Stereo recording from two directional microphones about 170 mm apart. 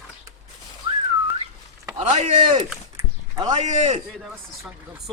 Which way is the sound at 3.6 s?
40° right (ahead or behind).